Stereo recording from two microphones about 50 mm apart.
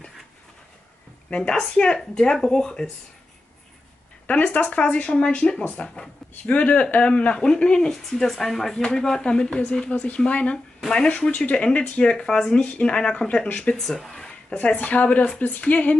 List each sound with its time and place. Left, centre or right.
1.3 s speech: left
4.3 s speech: left; by 7.9 s centre
7.9 s speech: centre
9.9 s speech: left
11.1 s speech: left
12.8 s speech: centre
13.7 s speech: centre
14.6 s speech: left